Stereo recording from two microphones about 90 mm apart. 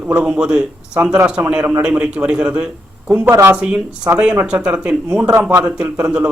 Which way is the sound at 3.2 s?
25° right (ahead or behind).